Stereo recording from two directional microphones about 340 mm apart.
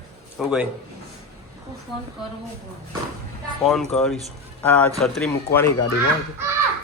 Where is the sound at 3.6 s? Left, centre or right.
Centre.